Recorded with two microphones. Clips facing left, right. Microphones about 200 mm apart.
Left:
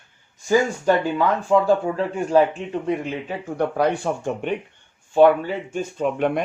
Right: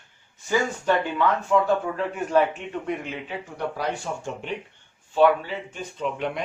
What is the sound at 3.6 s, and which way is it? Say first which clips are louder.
Speech: left 8 dB; 55° left (ahead or behind).